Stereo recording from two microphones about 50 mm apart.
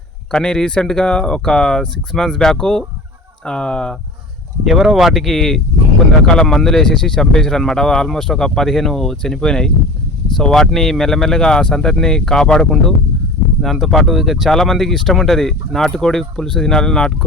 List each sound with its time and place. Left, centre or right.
0.3 s speech: centre
4.6 s speech: centre
13.6 s speech: centre